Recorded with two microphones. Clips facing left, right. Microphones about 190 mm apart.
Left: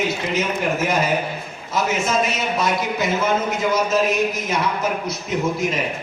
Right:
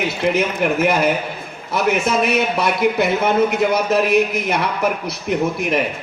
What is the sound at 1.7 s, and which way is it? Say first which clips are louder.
A man's voice: right 3 dB; 60° right (ahead or behind).